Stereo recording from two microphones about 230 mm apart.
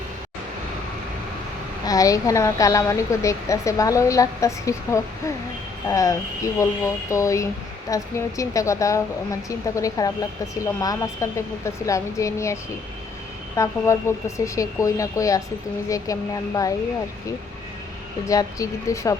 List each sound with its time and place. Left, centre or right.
1.8 s a woman's voice: centre
13.6 s a woman's voice: centre
18.3 s a woman's voice: centre